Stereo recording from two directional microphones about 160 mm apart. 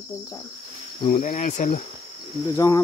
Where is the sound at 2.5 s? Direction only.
20° left (ahead or behind).